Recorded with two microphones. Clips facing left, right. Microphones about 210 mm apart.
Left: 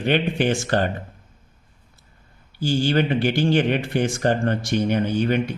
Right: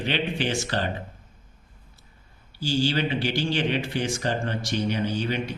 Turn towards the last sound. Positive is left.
turn(degrees=55)  # may be behind; listen again after turning